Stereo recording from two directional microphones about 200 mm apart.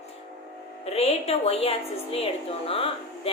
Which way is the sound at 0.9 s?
30° left (ahead or behind).